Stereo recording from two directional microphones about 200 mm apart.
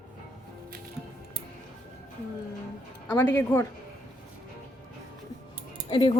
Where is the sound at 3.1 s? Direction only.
10° left (ahead or behind).